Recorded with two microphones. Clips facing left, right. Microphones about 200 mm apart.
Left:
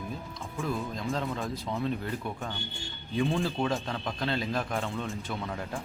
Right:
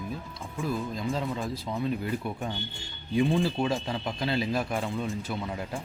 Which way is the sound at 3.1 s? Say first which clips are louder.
Right 4 dB; centre (ahead or behind).